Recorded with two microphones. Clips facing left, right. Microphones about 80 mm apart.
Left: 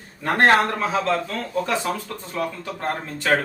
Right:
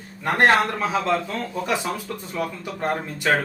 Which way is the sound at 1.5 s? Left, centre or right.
Centre.